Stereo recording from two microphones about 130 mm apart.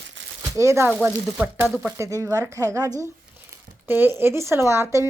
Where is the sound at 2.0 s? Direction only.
25° right (ahead or behind).